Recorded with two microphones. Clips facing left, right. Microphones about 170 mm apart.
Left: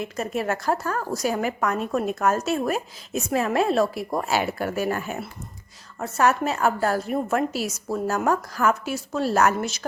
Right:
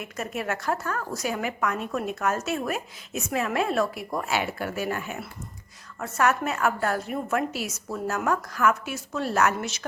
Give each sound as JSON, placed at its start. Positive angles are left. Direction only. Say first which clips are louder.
{"t": 0.0, "sound": "a woman's voice", "louder": "left 5 dB", "side_deg": 30}
{"t": 6.0, "sound": "a woman's voice", "louder": "left 3 dB", "side_deg": 30}